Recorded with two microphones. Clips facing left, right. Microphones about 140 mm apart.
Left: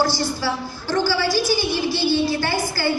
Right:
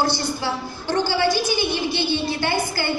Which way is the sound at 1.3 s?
55° right (ahead or behind).